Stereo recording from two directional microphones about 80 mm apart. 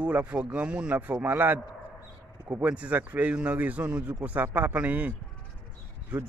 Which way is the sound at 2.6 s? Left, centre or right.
Centre.